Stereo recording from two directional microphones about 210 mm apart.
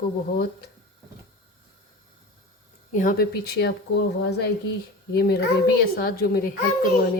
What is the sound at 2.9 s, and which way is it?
Speech, 40° left (ahead or behind).